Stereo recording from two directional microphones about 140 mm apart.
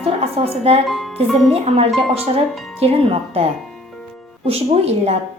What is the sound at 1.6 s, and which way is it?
A woman's voice, 50° right (ahead or behind).